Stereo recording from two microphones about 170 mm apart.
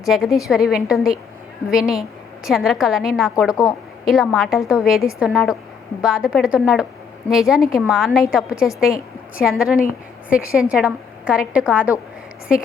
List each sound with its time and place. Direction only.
0.0 s a woman's voice: centre (ahead or behind)
3.5 s a woman's voice: 20° left (ahead or behind)
4.0 s a woman's voice: centre (ahead or behind)